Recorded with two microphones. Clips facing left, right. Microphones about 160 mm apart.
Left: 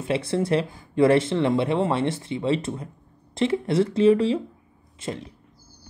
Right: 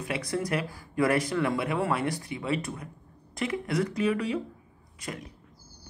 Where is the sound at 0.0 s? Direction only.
25° left (ahead or behind).